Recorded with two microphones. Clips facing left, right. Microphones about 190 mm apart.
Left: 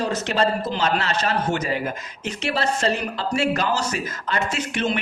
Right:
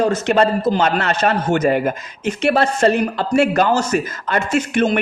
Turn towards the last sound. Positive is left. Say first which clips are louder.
# right 8 dB
turn(degrees=-50)  # may be behind; listen again after turning